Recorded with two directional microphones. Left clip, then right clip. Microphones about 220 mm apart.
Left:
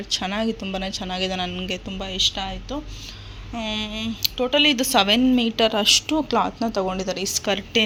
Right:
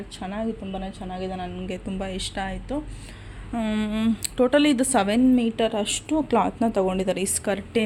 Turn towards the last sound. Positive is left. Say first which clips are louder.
# left 3 dB
turn(degrees=-5)  # may be behind; listen again after turning